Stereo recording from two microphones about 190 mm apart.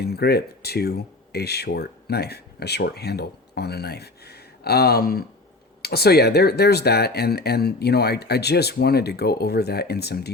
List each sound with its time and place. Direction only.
0.0 s speech: 60° left (ahead or behind)